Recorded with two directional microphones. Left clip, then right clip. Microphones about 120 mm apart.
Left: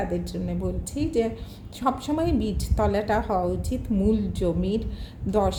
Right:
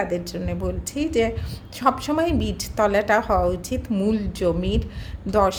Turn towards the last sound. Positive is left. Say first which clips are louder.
# right 4 dB
turn(degrees=-25)  # may be behind; listen again after turning